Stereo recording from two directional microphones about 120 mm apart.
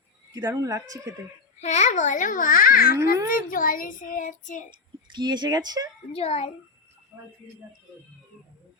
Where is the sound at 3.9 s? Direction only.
90° left.